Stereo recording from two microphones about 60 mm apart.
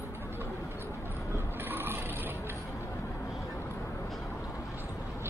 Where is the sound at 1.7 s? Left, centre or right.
Right.